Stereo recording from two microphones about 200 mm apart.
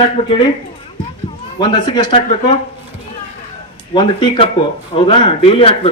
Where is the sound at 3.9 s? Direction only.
25° left (ahead or behind).